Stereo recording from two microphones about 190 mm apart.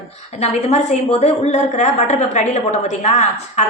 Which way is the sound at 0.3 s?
35° left (ahead or behind).